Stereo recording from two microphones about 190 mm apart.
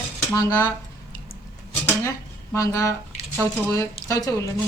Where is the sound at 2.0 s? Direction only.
15° left (ahead or behind).